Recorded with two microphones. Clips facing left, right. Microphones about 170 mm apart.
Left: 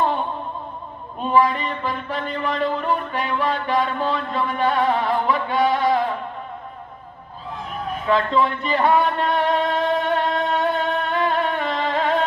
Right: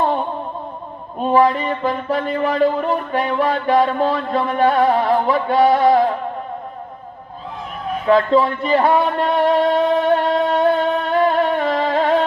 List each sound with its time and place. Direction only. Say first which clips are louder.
1.2 s music: right 4 dB; 40° right (ahead or behind)
8.0 s music: right 5 dB; 40° right (ahead or behind)